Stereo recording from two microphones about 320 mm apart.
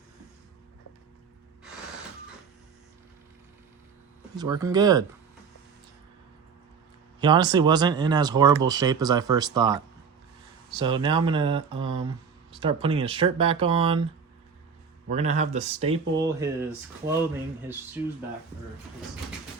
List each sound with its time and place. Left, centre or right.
4.4 s speech: centre
7.2 s speech: centre
15.1 s speech: right
16.2 s speech: centre